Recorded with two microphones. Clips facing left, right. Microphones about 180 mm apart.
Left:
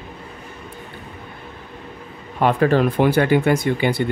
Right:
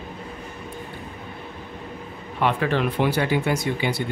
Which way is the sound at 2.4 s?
45° left (ahead or behind).